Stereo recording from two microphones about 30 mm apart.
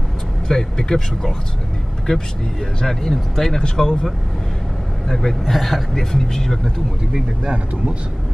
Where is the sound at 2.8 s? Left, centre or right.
Centre.